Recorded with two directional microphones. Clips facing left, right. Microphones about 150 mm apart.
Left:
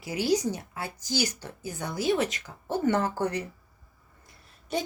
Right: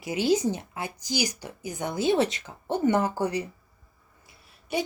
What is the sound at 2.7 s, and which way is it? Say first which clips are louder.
Speech: right 2 dB; 15° right (ahead or behind).